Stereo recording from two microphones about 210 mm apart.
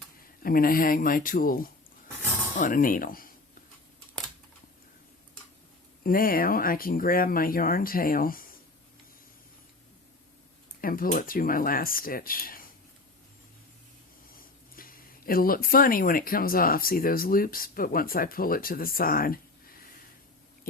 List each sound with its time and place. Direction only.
0.4 s speech: 45° left (ahead or behind)
6.0 s speech: 45° left (ahead or behind)
10.8 s speech: 45° left (ahead or behind)
14.3 s speech: 45° left (ahead or behind)